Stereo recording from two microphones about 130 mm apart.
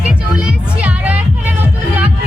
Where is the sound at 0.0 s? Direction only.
10° right (ahead or behind).